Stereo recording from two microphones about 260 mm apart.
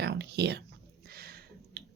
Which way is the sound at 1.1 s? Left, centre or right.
Right.